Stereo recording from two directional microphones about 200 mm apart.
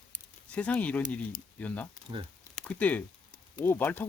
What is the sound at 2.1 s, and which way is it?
Speech, 20° right (ahead or behind).